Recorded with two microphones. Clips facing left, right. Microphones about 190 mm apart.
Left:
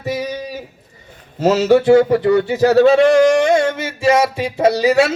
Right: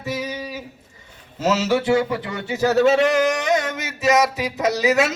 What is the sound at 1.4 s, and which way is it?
Speech, 60° left (ahead or behind).